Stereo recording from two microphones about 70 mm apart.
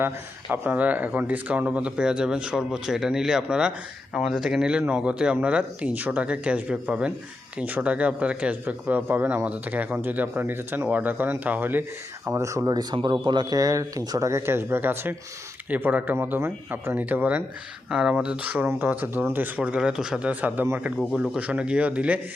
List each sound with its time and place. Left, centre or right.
0.5 s speech: right
12.3 s speech: right
12.7 s speech: right
13.3 s speech: right
14.3 s speech: right
18.4 s speech: right
19.5 s speech: centre